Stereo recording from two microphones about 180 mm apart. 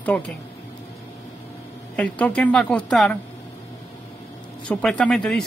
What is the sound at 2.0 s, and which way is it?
Speech, 5° left (ahead or behind).